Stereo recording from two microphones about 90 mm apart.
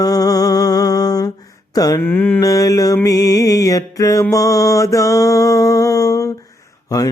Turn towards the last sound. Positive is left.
turn(degrees=40)  # may be behind; listen again after turning